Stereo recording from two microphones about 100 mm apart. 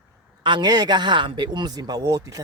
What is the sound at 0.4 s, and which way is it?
Speech, 50° right (ahead or behind).